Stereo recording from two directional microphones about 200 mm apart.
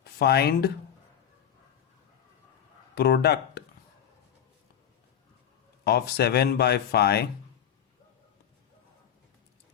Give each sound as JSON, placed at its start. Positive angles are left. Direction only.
{"t": 0.0, "sound": "speech", "side_deg": 50}
{"t": 2.9, "sound": "speech", "side_deg": 55}
{"t": 5.8, "sound": "speech", "side_deg": 55}